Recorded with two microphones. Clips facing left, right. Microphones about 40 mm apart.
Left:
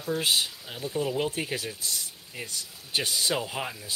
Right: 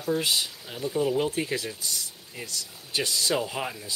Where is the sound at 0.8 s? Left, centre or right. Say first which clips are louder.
Right 3 dB; centre.